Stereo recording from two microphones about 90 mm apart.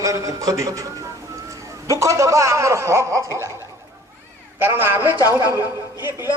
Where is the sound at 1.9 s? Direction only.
35° right (ahead or behind).